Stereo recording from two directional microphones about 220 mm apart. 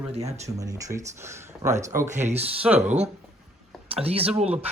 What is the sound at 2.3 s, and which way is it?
Speech, 30° right (ahead or behind).